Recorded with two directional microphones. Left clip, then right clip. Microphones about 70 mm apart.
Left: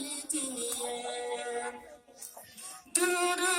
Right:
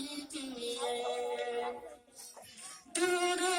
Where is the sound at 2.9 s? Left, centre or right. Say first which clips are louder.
Left 2 dB; left.